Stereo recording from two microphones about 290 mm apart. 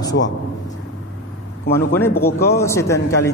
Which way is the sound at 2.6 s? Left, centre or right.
Centre.